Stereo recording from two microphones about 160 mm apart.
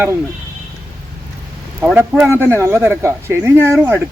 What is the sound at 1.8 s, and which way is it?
Speech, 10° right (ahead or behind).